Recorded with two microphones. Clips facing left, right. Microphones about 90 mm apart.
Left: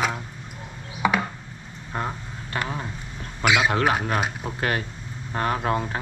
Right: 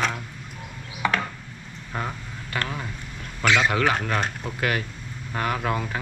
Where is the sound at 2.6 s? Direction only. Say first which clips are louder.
Left 1 dB; 20° left (ahead or behind).